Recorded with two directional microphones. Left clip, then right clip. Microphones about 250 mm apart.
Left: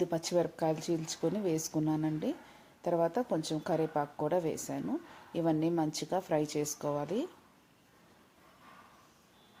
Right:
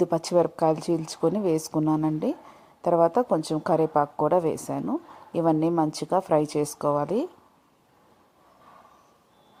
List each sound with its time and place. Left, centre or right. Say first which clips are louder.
0.0 s a woman's voice: right 9 dB; right